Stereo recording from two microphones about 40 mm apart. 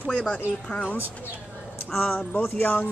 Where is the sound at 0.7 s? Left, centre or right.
Left.